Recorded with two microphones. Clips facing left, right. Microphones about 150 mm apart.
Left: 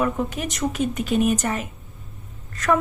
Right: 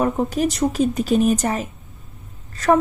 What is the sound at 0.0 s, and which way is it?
A woman's voice, 35° right (ahead or behind).